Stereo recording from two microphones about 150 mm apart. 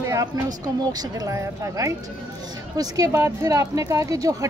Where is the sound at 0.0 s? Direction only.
25° right (ahead or behind).